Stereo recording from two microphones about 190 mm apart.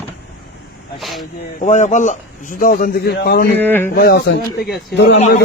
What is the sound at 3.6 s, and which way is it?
Speech, 10° left (ahead or behind).